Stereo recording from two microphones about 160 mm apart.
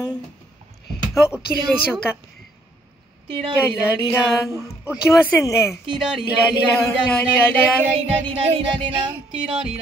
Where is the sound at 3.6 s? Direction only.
10° left (ahead or behind).